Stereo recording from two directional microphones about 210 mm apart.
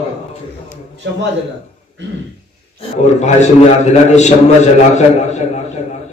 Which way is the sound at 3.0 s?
30° left (ahead or behind).